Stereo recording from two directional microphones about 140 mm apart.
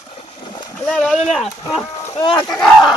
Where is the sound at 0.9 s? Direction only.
5° left (ahead or behind).